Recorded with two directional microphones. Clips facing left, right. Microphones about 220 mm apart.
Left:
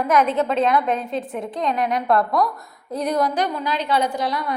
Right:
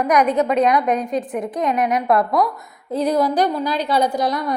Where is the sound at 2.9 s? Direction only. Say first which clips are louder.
Right 3 dB; 30° right (ahead or behind).